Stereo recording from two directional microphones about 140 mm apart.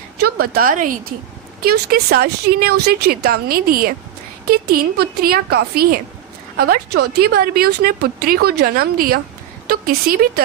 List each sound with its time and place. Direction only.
0.3 s speech: 90° right; by 0.9 s 70° right (ahead or behind)
1.6 s speech: 90° right
7.2 s speech: 90° right